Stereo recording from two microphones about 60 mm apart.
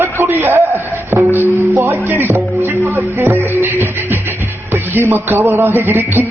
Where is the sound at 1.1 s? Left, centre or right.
Right.